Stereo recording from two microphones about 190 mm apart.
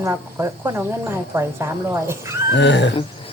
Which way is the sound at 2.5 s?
65° left (ahead or behind).